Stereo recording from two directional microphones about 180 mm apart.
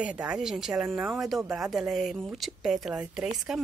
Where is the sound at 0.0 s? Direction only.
5° right (ahead or behind).